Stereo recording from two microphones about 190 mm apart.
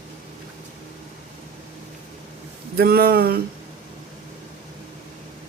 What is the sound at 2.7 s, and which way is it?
Speech, 55° right (ahead or behind).